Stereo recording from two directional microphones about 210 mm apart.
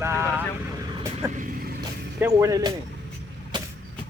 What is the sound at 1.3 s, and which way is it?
Vehicle, 40° right (ahead or behind).